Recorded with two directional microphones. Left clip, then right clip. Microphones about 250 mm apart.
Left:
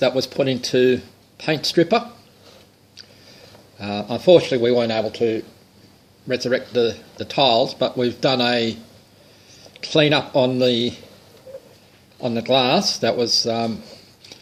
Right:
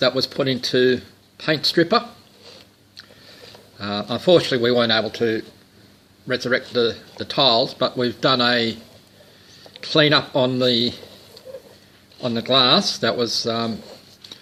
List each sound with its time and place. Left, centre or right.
0.0 s speech: centre
3.8 s speech: centre
6.2 s speech: centre
12.2 s speech: centre